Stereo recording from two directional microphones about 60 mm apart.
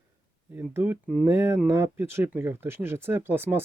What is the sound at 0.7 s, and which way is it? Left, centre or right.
Speech, right.